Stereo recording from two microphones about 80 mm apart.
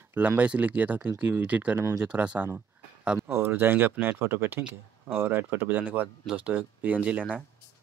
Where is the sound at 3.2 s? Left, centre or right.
Right; by 7.3 s centre.